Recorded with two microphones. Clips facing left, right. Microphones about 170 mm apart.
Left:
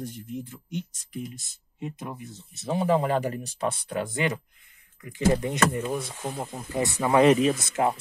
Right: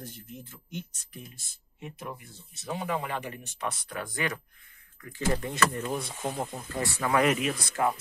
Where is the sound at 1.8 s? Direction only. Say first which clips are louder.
Left 5 dB; 20° left (ahead or behind).